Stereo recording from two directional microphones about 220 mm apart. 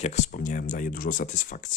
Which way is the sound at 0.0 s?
35° left (ahead or behind).